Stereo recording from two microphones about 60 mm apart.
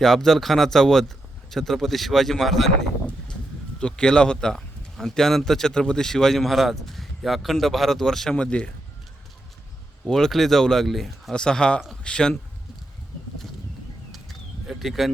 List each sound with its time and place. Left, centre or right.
0.0 s a man's voice: centre
3.8 s a man's voice: centre
8.4 s speech: centre
10.1 s speech: centre
14.1 s a sound: centre